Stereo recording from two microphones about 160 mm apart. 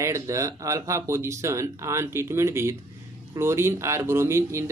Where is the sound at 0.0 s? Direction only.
20° right (ahead or behind).